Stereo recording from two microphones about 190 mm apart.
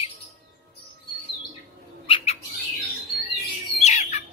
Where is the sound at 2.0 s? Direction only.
30° left (ahead or behind).